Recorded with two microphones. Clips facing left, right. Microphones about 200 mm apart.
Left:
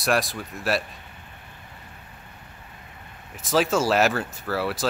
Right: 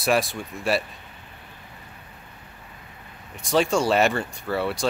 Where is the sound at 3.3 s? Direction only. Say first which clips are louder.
Right 1 dB; centre (ahead or behind).